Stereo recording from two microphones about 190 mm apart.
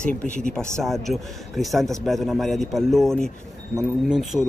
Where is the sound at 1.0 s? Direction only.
Centre (ahead or behind).